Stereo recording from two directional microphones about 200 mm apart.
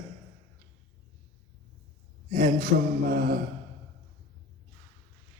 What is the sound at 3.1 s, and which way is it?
Speech, 45° right (ahead or behind).